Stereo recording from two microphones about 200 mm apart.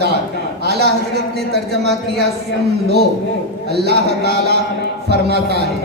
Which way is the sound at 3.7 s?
55° right (ahead or behind).